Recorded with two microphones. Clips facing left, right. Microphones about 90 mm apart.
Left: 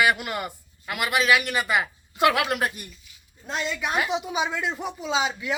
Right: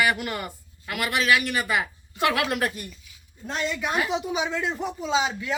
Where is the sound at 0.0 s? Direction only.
20° left (ahead or behind).